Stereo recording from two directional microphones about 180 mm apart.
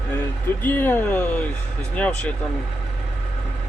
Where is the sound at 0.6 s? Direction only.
10° left (ahead or behind).